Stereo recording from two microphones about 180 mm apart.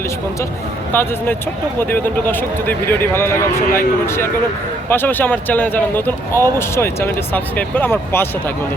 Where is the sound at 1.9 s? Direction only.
10° left (ahead or behind).